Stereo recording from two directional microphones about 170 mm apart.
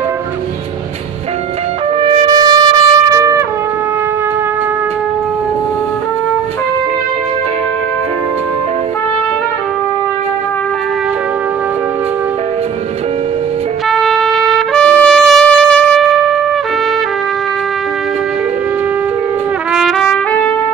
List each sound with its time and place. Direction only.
2.0 s music: 25° right (ahead or behind)
13.8 s trumpet: centre (ahead or behind)
19.7 s trumpet: centre (ahead or behind)